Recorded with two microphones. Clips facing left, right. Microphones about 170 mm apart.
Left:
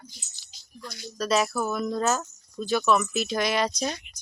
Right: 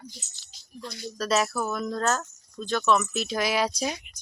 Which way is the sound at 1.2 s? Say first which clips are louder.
Left 1 dB; centre (ahead or behind).